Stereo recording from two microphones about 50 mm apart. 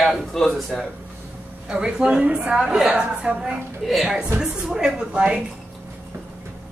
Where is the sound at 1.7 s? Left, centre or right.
Centre.